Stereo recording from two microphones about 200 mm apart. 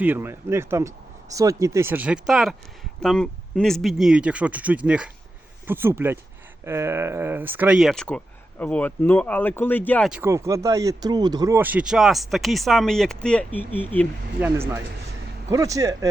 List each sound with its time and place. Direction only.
0.0 s speech: 10° right (ahead or behind); by 10.1 s 10° left (ahead or behind)
10.1 s speech: 10° right (ahead or behind); by 14.1 s 10° left (ahead or behind)
14.4 s speech: 10° right (ahead or behind)